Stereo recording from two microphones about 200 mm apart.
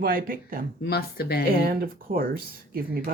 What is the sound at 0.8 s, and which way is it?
Speech, 50° left (ahead or behind).